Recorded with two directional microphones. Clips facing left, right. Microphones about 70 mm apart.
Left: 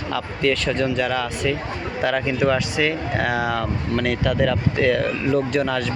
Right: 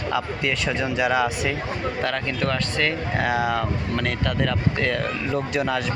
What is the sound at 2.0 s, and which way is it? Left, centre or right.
Speech, centre.